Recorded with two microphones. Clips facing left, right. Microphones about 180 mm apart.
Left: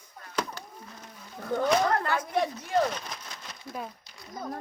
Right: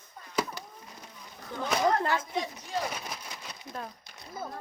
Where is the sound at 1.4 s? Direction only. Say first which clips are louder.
Left 4 dB; 50° left (ahead or behind).